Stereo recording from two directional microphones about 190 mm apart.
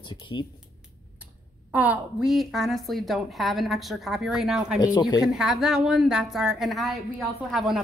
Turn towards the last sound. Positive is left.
turn(degrees=0)  # may be behind; listen again after turning